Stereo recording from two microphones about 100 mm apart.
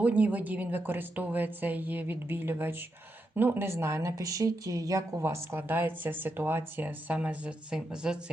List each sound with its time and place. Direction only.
0.0 s a woman's voice: 15° right (ahead or behind)